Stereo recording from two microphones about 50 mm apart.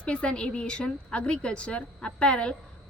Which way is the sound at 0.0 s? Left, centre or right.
Left.